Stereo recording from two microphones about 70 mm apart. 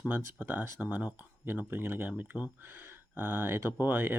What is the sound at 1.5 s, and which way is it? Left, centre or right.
Speech, right.